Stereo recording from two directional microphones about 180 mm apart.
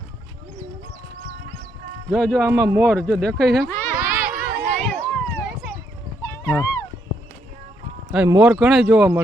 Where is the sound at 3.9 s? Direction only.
50° right (ahead or behind).